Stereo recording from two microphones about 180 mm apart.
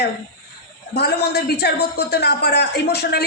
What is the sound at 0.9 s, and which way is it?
A man's voice, 65° left (ahead or behind).